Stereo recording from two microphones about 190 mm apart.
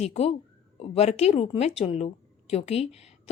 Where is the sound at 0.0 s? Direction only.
35° left (ahead or behind).